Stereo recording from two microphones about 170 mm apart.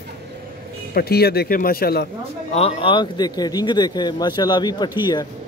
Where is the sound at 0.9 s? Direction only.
65° left (ahead or behind).